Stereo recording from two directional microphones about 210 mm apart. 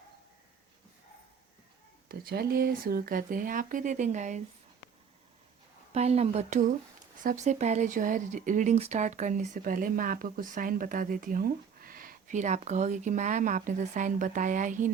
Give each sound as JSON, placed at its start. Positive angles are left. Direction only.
{"t": 2.0, "sound": "speech", "side_deg": -45}
{"t": 5.9, "sound": "speech", "side_deg": -30}